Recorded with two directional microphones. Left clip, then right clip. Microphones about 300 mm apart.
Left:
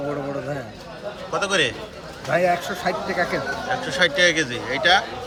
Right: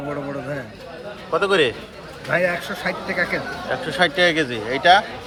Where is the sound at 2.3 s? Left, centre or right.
Centre.